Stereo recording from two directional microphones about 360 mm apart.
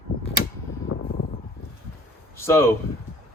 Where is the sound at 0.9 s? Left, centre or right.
Left.